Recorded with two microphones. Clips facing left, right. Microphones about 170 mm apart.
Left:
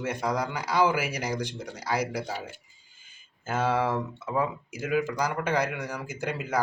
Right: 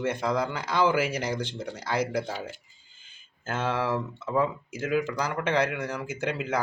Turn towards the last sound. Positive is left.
turn(degrees=10)  # may be behind; listen again after turning